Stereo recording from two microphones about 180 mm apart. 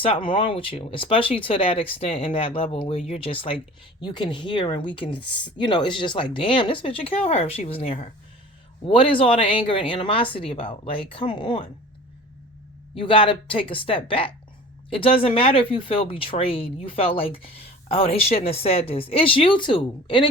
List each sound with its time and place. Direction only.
0.0 s speech: 30° left (ahead or behind)
12.9 s speech: 30° left (ahead or behind)